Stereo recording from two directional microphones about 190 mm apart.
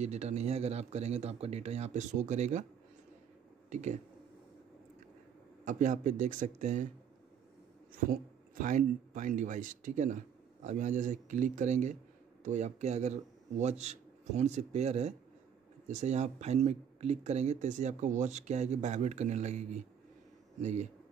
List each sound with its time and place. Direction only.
0.0 s speech: 35° right (ahead or behind)
3.7 s speech: 40° right (ahead or behind)
5.7 s speech: 40° right (ahead or behind)
7.9 s speech: 45° right (ahead or behind)